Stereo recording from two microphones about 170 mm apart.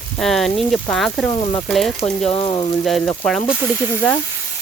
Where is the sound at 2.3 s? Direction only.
30° left (ahead or behind).